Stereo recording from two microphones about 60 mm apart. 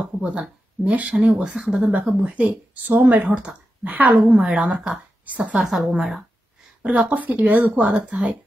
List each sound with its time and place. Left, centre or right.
0.2 s speech: right
2.8 s a woman's voice: right; by 5.0 s centre
5.2 s a woman's voice: right
5.6 s a woman's voice: centre
6.8 s a woman's voice: right